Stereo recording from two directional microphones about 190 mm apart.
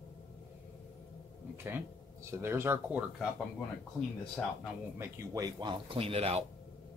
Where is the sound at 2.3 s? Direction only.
15° right (ahead or behind).